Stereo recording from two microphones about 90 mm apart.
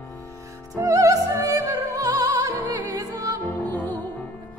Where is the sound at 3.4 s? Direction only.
20° left (ahead or behind).